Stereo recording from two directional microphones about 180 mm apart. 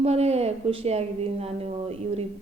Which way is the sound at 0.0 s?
35° right (ahead or behind).